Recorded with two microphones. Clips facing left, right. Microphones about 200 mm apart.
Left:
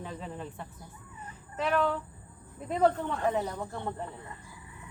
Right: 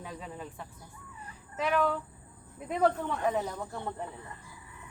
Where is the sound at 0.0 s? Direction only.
5° right (ahead or behind).